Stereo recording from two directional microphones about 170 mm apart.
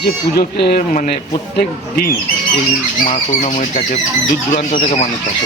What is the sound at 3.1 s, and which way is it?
Speech, 45° left (ahead or behind).